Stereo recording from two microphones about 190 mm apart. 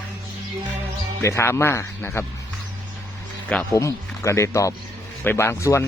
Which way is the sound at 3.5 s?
10° left (ahead or behind).